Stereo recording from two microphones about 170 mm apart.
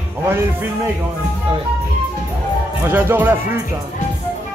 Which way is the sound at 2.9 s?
10° right (ahead or behind).